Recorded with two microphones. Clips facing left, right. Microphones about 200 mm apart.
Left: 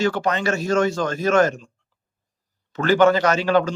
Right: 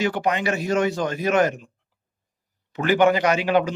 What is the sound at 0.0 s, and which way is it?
Speech, 15° right (ahead or behind).